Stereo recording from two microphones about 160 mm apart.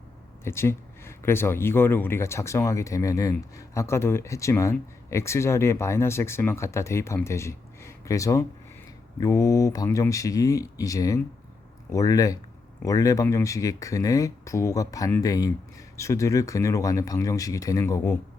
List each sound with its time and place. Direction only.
0.4 s speech: 15° left (ahead or behind)